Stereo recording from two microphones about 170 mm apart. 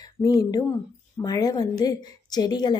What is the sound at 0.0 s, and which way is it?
A woman's voice, 20° left (ahead or behind).